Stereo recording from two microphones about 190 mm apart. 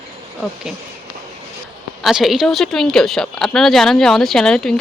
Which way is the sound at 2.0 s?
Centre (ahead or behind).